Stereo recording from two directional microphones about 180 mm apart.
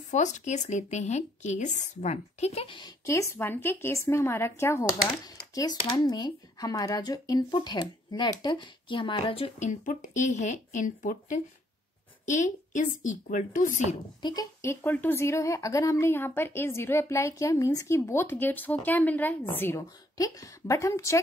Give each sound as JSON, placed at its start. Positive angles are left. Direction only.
{"t": 0.1, "sound": "speech", "side_deg": 40}
{"t": 3.1, "sound": "a woman's voice", "side_deg": 15}
{"t": 14.2, "sound": "speech", "side_deg": 20}